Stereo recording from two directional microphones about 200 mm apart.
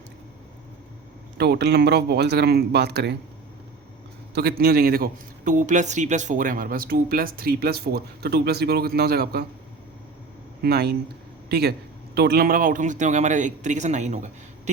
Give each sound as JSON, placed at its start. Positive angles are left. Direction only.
{"t": 1.4, "sound": "speech", "side_deg": -55}
{"t": 4.4, "sound": "speech", "side_deg": -55}
{"t": 10.6, "sound": "a man's voice", "side_deg": -55}